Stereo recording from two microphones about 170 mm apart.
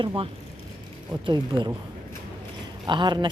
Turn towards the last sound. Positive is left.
turn(degrees=-25)  # may be behind; listen again after turning